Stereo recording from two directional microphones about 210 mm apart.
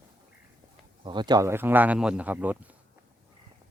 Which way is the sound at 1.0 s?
20° right (ahead or behind).